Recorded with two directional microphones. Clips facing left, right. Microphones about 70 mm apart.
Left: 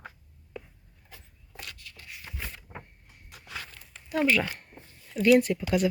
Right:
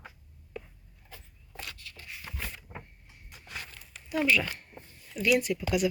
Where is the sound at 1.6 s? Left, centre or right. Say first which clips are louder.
Even; centre.